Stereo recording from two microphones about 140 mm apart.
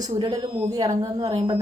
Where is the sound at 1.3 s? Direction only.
40° right (ahead or behind).